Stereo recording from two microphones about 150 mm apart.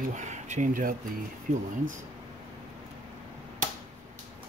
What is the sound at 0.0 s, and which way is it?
Speech, 55° right (ahead or behind).